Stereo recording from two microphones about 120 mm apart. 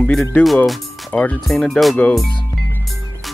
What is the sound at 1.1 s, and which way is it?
Speech, 10° left (ahead or behind).